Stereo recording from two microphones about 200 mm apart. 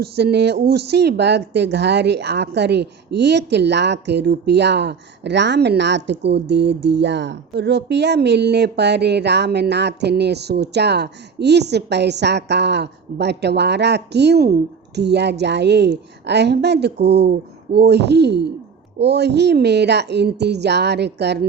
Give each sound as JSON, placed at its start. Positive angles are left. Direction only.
{"t": 0.0, "sound": "speech", "side_deg": -55}